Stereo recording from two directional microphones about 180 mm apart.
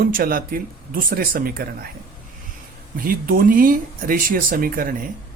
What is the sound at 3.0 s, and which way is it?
Speech, 50° right (ahead or behind).